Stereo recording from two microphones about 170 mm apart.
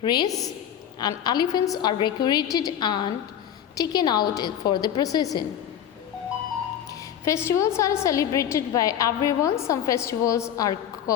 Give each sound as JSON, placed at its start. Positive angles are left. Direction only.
{"t": 0.0, "sound": "a woman's voice", "side_deg": 25}
{"t": 6.9, "sound": "a woman's voice", "side_deg": 15}